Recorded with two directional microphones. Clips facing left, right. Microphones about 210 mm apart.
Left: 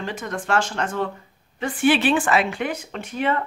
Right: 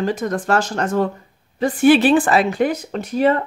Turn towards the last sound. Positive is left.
turn(degrees=-35)  # may be behind; listen again after turning